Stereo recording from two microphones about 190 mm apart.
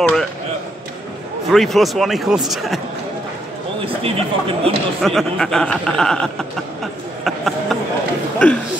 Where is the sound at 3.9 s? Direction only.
30° right (ahead or behind).